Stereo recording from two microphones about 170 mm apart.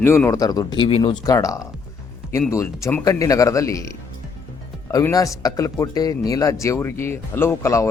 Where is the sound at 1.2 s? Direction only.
20° left (ahead or behind).